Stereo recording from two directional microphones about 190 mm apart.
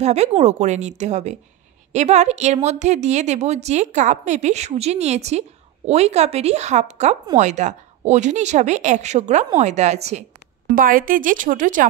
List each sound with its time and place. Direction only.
0.0 s speech: 35° right (ahead or behind)
10.7 s speech: 45° right (ahead or behind)